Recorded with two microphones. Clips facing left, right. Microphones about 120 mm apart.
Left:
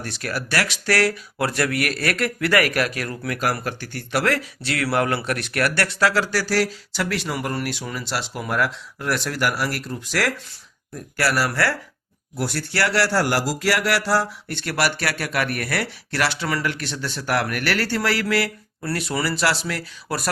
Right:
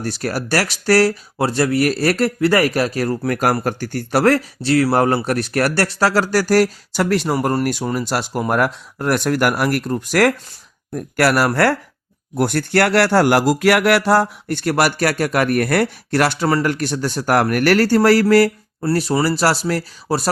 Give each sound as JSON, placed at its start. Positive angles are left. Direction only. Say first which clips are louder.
{"t": 0.0, "sound": "speech", "louder": "right 6 dB", "side_deg": -40}